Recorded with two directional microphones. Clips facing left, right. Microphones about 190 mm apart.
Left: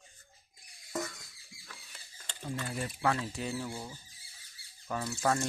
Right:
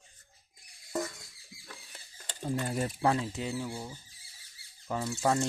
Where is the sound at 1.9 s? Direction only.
40° right (ahead or behind).